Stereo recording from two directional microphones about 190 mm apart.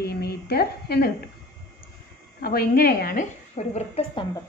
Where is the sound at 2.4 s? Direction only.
55° left (ahead or behind).